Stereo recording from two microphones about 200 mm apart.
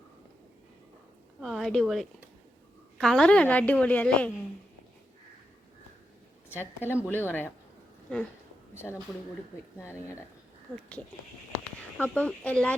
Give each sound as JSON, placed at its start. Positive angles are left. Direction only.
{"t": 1.4, "sound": "a woman's voice", "side_deg": 0}
{"t": 6.6, "sound": "a woman's voice", "side_deg": 10}
{"t": 11.9, "sound": "a woman's voice", "side_deg": 10}